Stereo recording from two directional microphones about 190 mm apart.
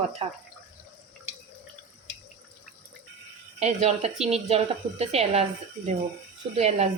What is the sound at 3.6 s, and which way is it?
Speech, 35° right (ahead or behind).